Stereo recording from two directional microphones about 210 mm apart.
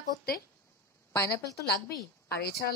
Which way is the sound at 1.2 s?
50° left (ahead or behind).